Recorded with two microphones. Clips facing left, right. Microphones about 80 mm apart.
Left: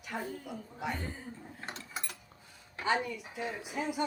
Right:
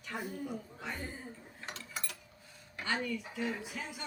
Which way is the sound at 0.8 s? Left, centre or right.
Centre.